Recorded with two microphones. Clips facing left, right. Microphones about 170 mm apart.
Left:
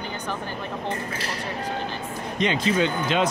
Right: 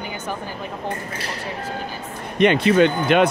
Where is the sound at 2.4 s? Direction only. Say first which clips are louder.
Right 8 dB; 65° right (ahead or behind).